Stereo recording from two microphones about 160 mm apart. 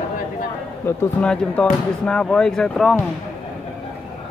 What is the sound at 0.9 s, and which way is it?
A man's voice, 15° left (ahead or behind).